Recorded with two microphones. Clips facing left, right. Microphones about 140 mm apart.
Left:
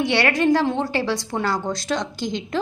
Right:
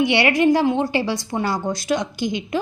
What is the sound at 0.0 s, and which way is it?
A woman's voice, 15° right (ahead or behind).